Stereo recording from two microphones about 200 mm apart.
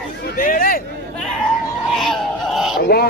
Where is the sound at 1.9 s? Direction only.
Centre (ahead or behind).